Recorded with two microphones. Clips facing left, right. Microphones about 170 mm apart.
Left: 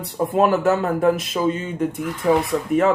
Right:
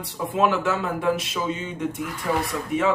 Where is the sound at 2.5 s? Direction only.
35° left (ahead or behind).